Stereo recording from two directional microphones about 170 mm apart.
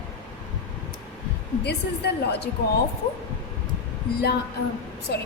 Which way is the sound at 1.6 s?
75° left (ahead or behind).